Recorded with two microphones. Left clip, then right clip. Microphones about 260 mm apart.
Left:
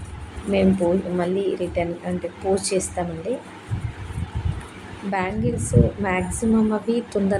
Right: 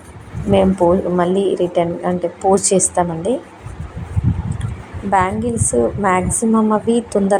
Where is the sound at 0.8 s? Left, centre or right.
Right.